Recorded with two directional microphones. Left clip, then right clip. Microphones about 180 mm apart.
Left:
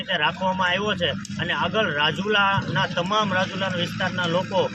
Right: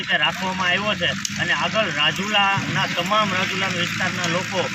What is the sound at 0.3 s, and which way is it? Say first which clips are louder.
Speech: right 1 dB; 25° left (ahead or behind).